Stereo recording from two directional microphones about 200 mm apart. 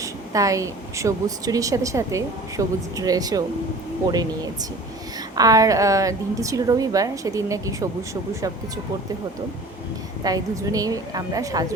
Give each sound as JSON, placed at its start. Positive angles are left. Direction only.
{"t": 0.0, "sound": "a woman's voice", "side_deg": -15}
{"t": 5.3, "sound": "a woman's voice", "side_deg": -20}
{"t": 10.2, "sound": "a woman's voice", "side_deg": -15}